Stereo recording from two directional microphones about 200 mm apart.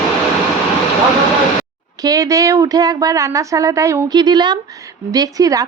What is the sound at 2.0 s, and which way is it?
A woman's voice, 15° right (ahead or behind).